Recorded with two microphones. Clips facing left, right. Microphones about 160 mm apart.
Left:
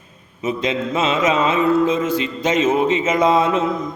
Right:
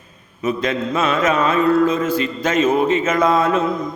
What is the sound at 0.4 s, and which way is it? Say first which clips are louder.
Mantra: right 1 dB; 20° left (ahead or behind).